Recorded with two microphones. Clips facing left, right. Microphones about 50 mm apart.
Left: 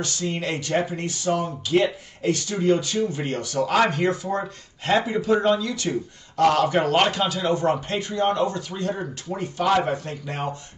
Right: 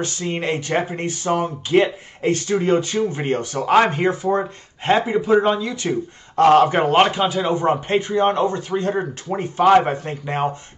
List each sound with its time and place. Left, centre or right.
0.0 s a man's voice: right